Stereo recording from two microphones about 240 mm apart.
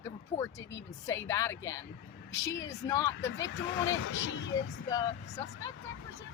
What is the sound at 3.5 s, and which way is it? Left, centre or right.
Speech, left.